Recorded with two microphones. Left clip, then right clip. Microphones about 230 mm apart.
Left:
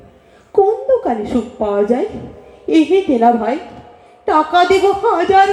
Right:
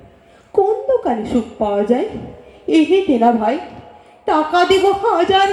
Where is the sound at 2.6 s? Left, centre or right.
Right.